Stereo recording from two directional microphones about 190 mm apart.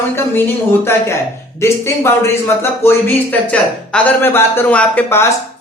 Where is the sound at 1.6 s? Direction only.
15° left (ahead or behind).